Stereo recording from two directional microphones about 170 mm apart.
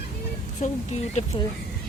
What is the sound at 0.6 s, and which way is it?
Speech, 40° left (ahead or behind).